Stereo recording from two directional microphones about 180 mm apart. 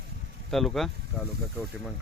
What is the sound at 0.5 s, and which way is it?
Speech, centre (ahead or behind).